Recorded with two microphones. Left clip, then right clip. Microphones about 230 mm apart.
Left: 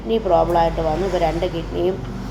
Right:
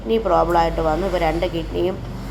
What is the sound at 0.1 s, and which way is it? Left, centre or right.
Speech, centre.